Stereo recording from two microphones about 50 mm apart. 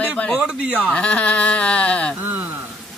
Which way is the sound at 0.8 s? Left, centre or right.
Centre.